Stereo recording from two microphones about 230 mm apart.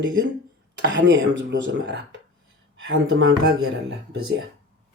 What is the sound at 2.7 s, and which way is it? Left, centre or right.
Speech, right.